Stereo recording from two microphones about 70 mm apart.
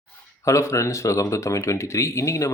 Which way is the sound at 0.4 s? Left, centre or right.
Left.